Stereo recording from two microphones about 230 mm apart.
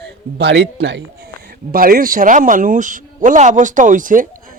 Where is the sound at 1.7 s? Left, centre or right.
Right.